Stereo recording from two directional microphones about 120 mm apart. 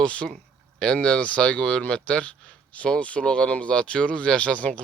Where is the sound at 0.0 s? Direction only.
10° left (ahead or behind).